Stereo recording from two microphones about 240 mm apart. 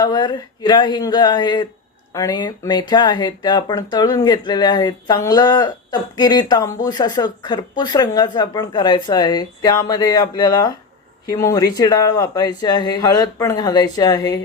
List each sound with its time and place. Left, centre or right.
0.0 s speech: centre